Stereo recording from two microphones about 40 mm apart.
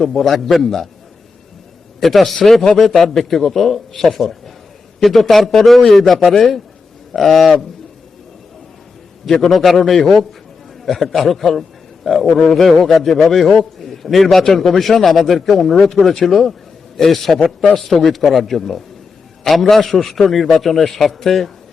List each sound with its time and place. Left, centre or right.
0.0 s a man's voice: centre
2.0 s a man's voice: centre
9.2 s a man's voice: centre